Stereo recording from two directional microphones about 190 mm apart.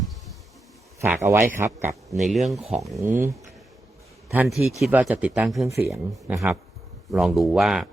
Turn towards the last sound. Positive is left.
turn(degrees=0)  # may be behind; listen again after turning